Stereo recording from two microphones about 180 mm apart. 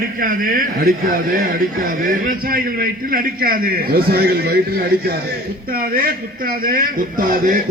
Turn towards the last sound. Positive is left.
turn(degrees=-50)  # may be behind; listen again after turning